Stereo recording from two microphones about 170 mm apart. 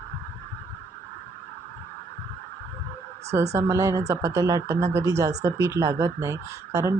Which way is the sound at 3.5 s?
20° right (ahead or behind).